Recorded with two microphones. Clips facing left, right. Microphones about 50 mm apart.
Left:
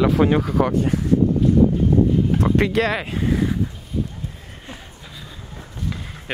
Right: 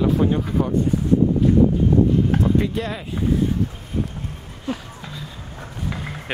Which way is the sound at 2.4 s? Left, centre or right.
Left.